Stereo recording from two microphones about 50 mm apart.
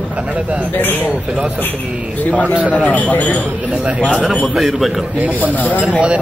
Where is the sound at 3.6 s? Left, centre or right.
Right.